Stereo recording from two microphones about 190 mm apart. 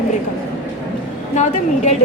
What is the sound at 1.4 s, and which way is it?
Speech, 35° left (ahead or behind).